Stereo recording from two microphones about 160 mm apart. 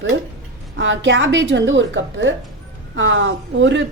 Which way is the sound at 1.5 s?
90° right.